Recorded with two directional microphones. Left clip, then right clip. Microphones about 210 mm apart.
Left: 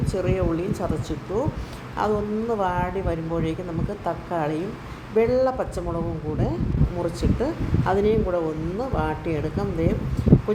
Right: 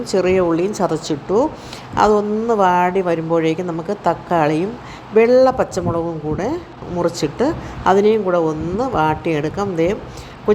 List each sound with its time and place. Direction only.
0.0 s speech: 20° right (ahead or behind)
7.0 s speech: 20° right (ahead or behind)